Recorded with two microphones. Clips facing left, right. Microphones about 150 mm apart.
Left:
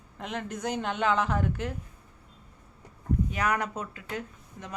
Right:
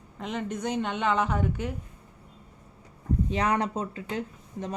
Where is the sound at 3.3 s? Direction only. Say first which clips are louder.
Right 6 dB; 25° right (ahead or behind).